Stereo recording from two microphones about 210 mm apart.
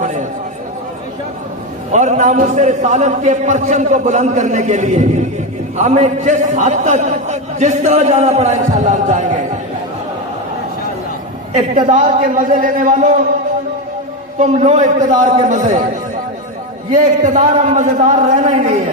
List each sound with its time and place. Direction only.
1.9 s a man's voice: 35° right (ahead or behind)
11.5 s a man's voice: 40° right (ahead or behind)
14.4 s a man's voice: 35° right (ahead or behind)
16.9 s a man's voice: 35° right (ahead or behind)